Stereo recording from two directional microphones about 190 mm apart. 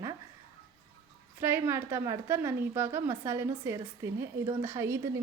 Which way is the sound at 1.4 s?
15° right (ahead or behind).